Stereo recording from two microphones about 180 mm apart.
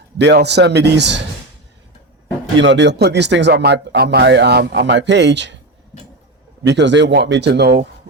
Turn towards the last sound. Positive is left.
turn(degrees=-65)  # may be behind; listen again after turning